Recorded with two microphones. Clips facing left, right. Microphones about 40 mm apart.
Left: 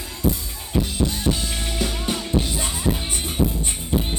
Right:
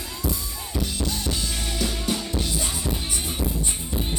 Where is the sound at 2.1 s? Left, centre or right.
Left.